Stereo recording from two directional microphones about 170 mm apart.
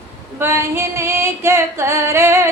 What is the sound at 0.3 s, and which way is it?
Female singing, 15° right (ahead or behind).